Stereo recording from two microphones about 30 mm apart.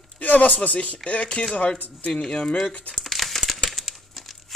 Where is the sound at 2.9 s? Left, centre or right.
Centre.